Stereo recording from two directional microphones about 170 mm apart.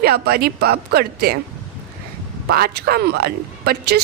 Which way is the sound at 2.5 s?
65° right (ahead or behind).